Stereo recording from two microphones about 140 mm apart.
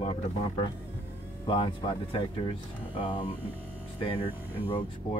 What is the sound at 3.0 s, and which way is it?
Speech, 35° left (ahead or behind).